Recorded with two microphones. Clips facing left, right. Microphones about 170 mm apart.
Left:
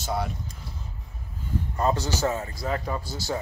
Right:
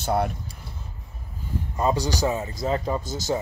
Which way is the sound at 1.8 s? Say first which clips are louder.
Right 2 dB; 15° right (ahead or behind).